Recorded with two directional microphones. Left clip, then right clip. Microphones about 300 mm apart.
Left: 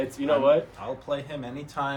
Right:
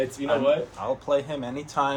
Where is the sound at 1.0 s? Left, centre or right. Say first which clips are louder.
Right 6 dB; centre.